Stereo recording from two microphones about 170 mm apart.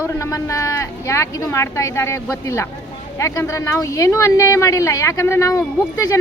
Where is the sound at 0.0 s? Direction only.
15° left (ahead or behind).